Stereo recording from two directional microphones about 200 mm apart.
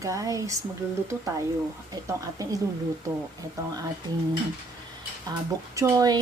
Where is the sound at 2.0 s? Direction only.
15° right (ahead or behind).